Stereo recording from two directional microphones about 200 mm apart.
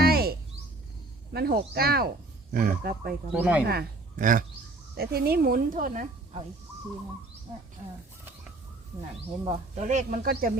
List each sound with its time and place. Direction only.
0.0 s cricket: 50° right (ahead or behind)
1.3 s a woman's voice: 55° right (ahead or behind)
3.3 s speech: 10° right (ahead or behind)
3.7 s a woman's voice: 45° right (ahead or behind)
9.5 s speech: 35° right (ahead or behind)